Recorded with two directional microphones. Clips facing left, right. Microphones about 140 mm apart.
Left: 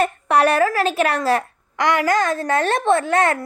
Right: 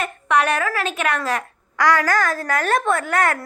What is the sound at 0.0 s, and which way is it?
Speech, 35° left (ahead or behind).